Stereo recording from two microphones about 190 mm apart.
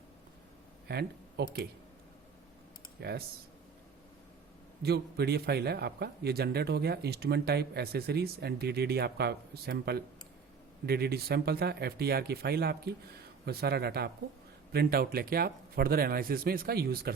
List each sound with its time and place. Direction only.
0.9 s speech: 55° right (ahead or behind)
3.0 s speech: 55° right (ahead or behind)
4.8 s speech: 60° right (ahead or behind)